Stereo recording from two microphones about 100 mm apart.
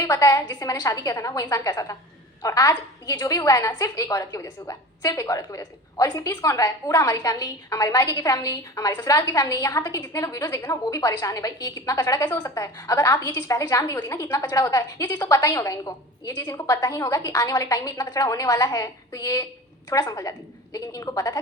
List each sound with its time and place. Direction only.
0.0 s a woman's voice: 35° left (ahead or behind)